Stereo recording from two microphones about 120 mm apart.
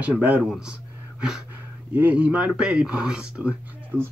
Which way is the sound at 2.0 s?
10° right (ahead or behind).